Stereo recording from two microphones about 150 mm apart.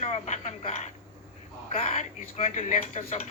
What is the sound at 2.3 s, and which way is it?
Speech, 50° left (ahead or behind).